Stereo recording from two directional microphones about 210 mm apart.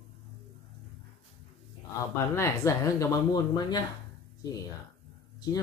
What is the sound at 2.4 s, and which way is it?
Speech, 15° left (ahead or behind).